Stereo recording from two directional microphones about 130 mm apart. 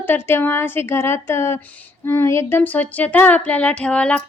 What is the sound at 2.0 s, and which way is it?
Speech, 20° left (ahead or behind).